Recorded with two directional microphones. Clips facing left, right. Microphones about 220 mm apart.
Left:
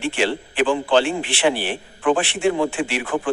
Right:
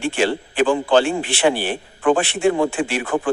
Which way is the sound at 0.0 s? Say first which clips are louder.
Right 2 dB; 45° right (ahead or behind).